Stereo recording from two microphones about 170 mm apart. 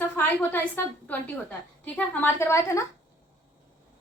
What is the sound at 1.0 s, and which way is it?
A woman's voice, 10° left (ahead or behind).